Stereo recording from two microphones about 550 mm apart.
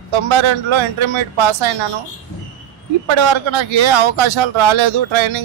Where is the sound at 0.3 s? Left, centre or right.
Right.